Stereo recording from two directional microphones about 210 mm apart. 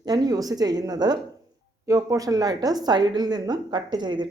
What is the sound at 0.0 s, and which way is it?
A woman's voice, 20° right (ahead or behind).